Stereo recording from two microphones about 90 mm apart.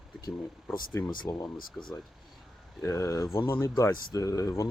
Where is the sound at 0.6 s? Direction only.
25° left (ahead or behind).